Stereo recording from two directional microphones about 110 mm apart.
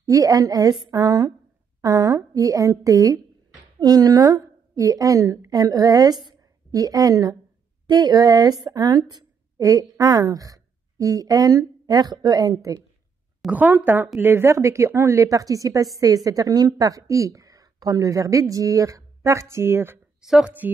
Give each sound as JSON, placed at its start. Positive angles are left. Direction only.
{"t": 0.0, "sound": "a woman's voice", "side_deg": -30}
{"t": 13.5, "sound": "a woman's voice", "side_deg": -15}
{"t": 20.2, "sound": "a woman's voice", "side_deg": -5}